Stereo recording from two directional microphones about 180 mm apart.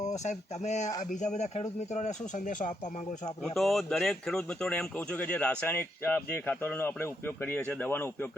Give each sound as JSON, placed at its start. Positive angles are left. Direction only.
{"t": 0.2, "sound": "speech", "side_deg": 40}
{"t": 3.4, "sound": "speech", "side_deg": 0}